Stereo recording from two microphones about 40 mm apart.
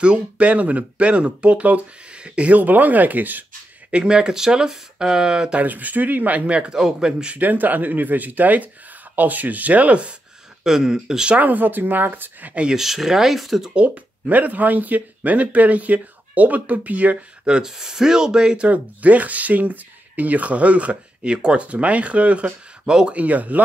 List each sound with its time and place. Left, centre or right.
0.0 s speech: right
2.5 s speech: right
3.9 s speech: right
5.6 s speech: right
6.8 s speech: centre
7.3 s speech: right
10.6 s speech: centre
11.3 s speech: right
12.7 s speech: centre
13.7 s speech: right
17.5 s speech: centre
18.7 s speech: right
22.8 s speech: centre
23.1 s speech: right